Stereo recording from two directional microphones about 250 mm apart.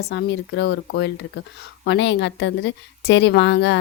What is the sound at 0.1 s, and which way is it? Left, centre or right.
A woman's voice, left.